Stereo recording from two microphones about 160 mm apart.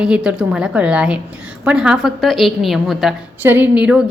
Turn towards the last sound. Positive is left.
turn(degrees=-5)  # may be behind; listen again after turning